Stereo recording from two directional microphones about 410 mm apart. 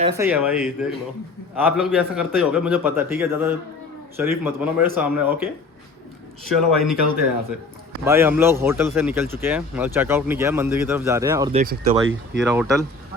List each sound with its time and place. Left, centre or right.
0.0 s speech: centre
8.0 s speech: centre
11.6 s speech: right
12.4 s speech: centre